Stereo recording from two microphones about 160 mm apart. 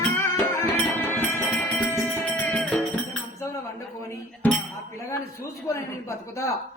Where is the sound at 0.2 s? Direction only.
15° left (ahead or behind).